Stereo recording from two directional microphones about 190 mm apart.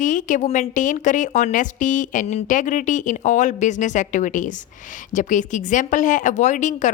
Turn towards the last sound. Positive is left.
turn(degrees=40)  # may be behind; listen again after turning